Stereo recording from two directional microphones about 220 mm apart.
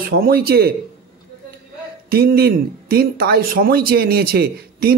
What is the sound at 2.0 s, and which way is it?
Speech, 45° right (ahead or behind).